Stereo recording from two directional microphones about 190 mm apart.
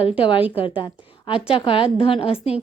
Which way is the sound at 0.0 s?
30° left (ahead or behind).